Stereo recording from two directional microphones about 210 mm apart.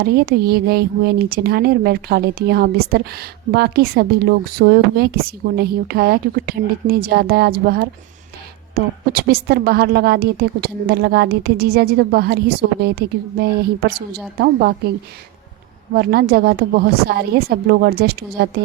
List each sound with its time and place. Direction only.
0.0 s speech: 50° right (ahead or behind)
16.0 s speech: 45° right (ahead or behind)